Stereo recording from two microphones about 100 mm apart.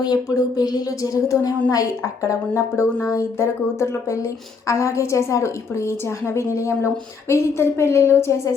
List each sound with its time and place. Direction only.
0.0 s a woman's voice: 40° left (ahead or behind)